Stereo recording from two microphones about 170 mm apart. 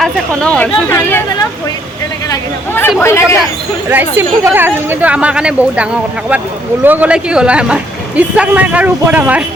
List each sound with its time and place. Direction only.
0.0 s speech: 5° left (ahead or behind)
2.3 s speech: 15° left (ahead or behind)
3.8 s a man's voice: 10° right (ahead or behind)